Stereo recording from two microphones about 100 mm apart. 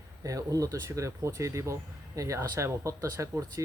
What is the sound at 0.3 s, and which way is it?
Speech, 35° right (ahead or behind).